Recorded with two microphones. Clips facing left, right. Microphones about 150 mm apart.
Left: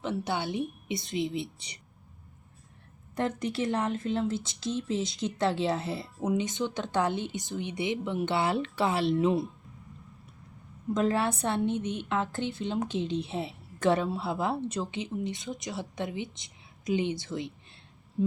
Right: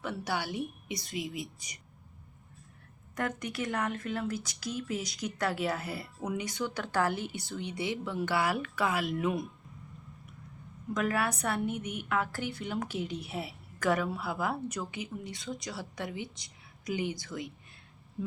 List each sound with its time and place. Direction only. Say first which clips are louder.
0.0 s a woman's voice: left 3 dB; 25° left (ahead or behind)
3.2 s a woman's voice: left 4 dB; 30° left (ahead or behind)
10.9 s a woman's voice: left 4 dB; 25° left (ahead or behind)